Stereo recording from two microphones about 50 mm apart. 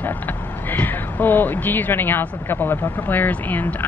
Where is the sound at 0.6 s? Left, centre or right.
Left.